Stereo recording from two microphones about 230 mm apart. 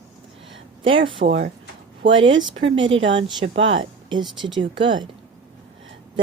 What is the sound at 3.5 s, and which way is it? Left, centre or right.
Speech, right.